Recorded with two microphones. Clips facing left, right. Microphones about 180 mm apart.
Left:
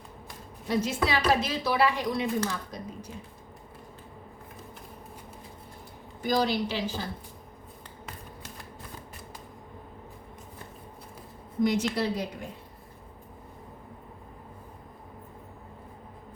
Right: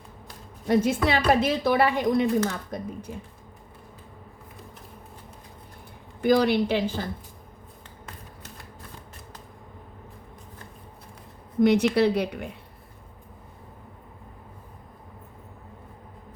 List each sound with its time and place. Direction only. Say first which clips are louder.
0.7 s speech: right 5 dB; 50° right (ahead or behind)
6.2 s a woman's voice: right 6 dB; 60° right (ahead or behind)
11.6 s a woman's voice: right 7 dB; 65° right (ahead or behind)